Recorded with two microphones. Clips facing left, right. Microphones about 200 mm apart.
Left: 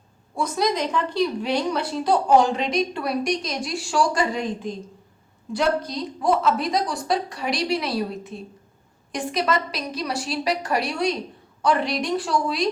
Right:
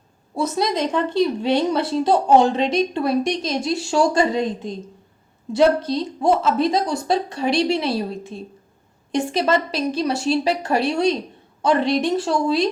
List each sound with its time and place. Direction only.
0.3 s a woman's voice: 25° right (ahead or behind)
5.5 s a woman's voice: 25° right (ahead or behind)